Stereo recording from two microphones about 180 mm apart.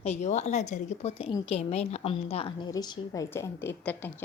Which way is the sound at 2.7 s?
20° left (ahead or behind).